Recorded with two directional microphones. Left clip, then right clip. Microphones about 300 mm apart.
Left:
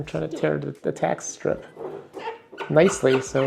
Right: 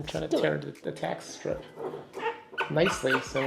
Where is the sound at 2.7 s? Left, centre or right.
Left.